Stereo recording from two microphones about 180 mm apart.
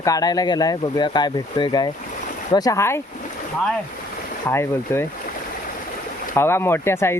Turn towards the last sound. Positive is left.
turn(degrees=15)  # may be behind; listen again after turning